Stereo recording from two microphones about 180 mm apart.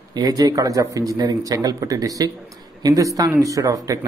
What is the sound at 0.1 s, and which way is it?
Speech, 20° right (ahead or behind).